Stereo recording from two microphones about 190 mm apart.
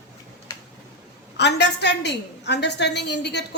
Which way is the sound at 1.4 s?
65° left (ahead or behind).